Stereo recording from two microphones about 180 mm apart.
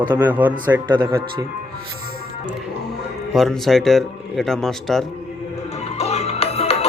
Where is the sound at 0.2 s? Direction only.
10° right (ahead or behind).